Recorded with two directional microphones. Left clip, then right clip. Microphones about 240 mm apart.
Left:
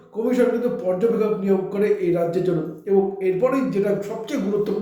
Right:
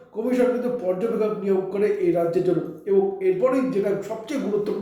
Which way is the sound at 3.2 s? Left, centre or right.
Centre.